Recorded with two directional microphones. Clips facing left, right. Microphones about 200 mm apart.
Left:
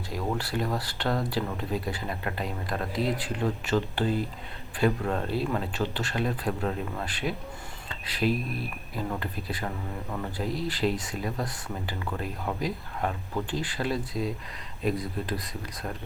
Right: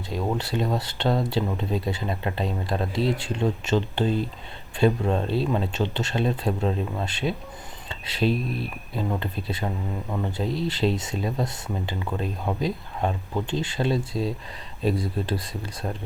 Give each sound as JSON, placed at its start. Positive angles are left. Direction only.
{"t": 0.1, "sound": "speech", "side_deg": -25}